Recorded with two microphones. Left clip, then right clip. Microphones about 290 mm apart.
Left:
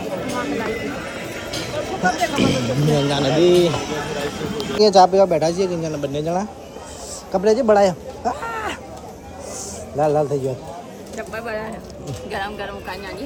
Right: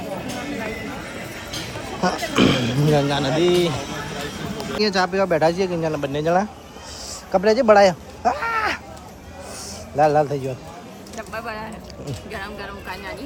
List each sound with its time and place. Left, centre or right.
0.3 s a sound: centre
2.5 s speech: centre
2.8 s a man's voice: centre
7.3 s speech: centre
10.0 s a man's voice: centre
11.3 s a sound: centre
12.3 s a man's voice: centre